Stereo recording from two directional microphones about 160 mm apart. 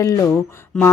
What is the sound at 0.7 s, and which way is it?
Speech, 5° left (ahead or behind).